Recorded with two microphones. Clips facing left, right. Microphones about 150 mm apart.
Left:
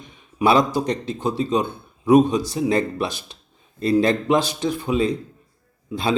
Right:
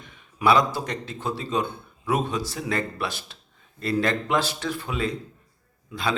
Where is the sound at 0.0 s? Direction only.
20° left (ahead or behind).